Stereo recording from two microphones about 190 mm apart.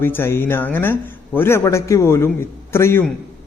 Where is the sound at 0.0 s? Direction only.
10° left (ahead or behind).